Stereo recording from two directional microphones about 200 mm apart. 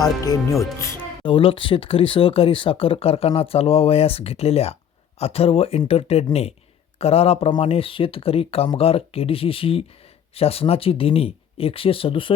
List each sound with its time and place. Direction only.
0.0 s speech: 15° left (ahead or behind)